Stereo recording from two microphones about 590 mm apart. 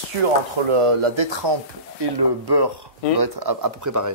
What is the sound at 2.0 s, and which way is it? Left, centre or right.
Speech, right.